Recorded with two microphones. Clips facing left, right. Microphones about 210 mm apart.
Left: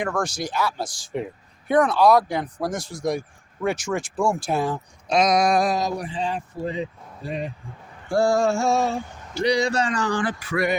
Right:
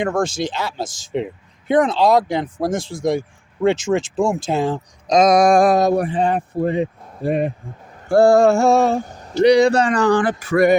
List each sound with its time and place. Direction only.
0.0 s speech: 25° right (ahead or behind)
5.0 s speech: 45° right (ahead or behind); by 9.0 s 60° right (ahead or behind)
9.0 s a sound: 40° right (ahead or behind)
9.4 s speech: 60° right (ahead or behind)